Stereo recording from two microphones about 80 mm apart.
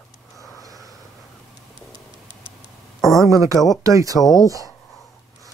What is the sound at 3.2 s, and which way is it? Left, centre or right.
Speech, right.